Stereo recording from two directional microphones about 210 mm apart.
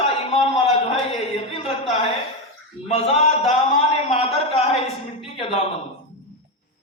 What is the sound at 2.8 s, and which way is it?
Speech, 25° left (ahead or behind).